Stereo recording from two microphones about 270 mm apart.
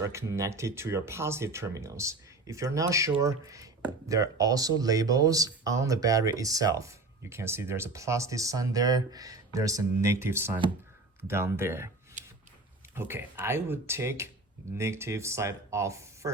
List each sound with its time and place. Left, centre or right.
0.0 s speech: centre
12.2 s shuffling cards: right
13.0 s speech: centre